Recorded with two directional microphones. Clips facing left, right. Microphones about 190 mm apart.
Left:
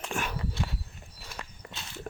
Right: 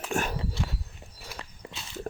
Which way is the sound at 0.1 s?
45° right (ahead or behind).